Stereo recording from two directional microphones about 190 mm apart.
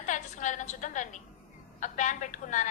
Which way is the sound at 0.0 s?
40° left (ahead or behind).